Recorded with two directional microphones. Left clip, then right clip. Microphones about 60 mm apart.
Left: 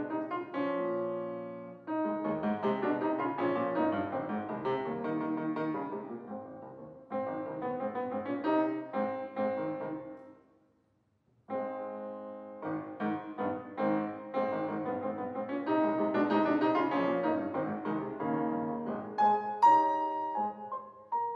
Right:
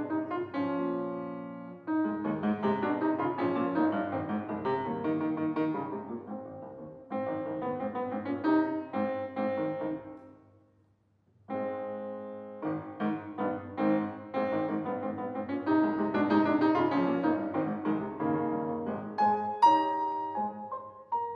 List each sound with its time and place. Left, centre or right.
0.1 s music: centre
7.1 s music: centre
11.5 s keyboard: centre
12.6 s music: centre
18.9 s music: centre